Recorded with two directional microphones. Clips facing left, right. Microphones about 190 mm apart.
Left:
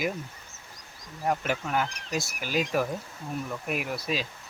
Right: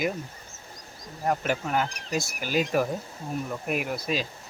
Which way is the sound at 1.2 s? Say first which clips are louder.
Right 2 dB; centre (ahead or behind).